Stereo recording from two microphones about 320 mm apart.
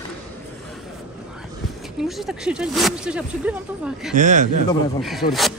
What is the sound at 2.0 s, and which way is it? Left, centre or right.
Speech, centre.